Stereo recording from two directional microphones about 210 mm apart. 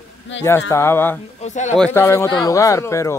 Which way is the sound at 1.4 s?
35° left (ahead or behind).